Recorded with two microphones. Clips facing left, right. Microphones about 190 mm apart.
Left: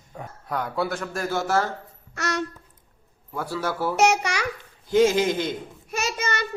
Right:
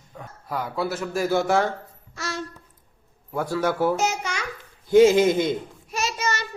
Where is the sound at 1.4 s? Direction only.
5° left (ahead or behind).